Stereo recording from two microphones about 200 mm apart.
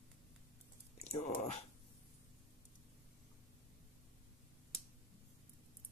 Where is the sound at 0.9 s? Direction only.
35° left (ahead or behind).